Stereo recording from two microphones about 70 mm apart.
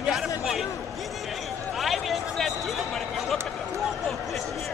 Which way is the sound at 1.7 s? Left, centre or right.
Centre.